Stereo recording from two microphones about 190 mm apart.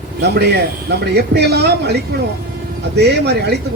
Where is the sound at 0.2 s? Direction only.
60° right (ahead or behind).